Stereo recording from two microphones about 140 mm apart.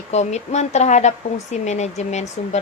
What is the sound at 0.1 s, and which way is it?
Speech, 55° left (ahead or behind).